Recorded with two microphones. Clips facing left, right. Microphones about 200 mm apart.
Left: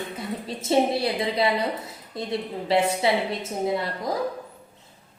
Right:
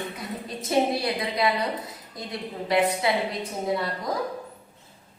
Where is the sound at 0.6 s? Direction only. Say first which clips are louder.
Left 2 dB; 25° left (ahead or behind).